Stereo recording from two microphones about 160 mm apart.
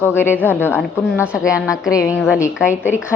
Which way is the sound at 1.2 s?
5° right (ahead or behind).